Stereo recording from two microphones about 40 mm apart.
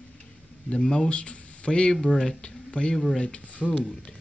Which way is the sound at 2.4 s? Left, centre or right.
Left.